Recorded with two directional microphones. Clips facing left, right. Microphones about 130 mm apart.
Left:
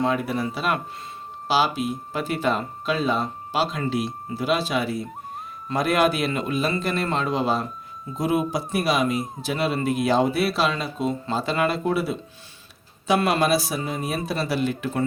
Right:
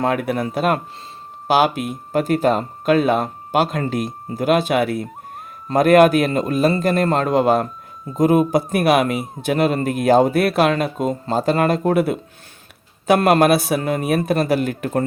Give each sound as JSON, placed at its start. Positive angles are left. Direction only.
{"t": 0.0, "sound": "a man's voice", "side_deg": -60}
{"t": 2.1, "sound": "a man's voice", "side_deg": -45}